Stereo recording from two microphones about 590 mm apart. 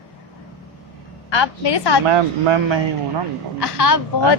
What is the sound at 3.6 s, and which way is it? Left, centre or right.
Speech, left.